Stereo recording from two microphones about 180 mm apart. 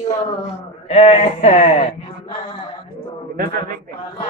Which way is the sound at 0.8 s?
35° left (ahead or behind).